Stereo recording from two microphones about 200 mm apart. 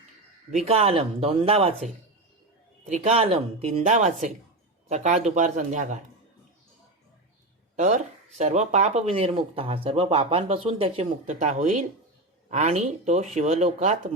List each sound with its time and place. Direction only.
0.5 s speech: 30° right (ahead or behind)
7.8 s speech: 35° right (ahead or behind)